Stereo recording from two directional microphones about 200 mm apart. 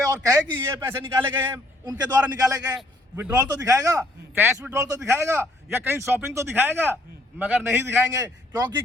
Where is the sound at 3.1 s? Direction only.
5° right (ahead or behind).